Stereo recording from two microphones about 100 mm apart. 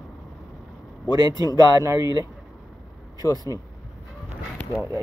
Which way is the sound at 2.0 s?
45° left (ahead or behind).